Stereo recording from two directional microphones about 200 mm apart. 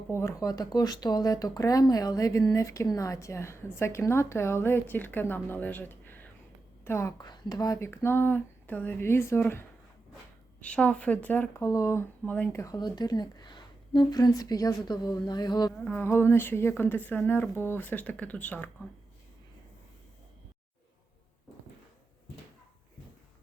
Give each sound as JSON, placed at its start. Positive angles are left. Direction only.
{"t": 0.1, "sound": "speech", "side_deg": 15}
{"t": 15.8, "sound": "speech", "side_deg": 10}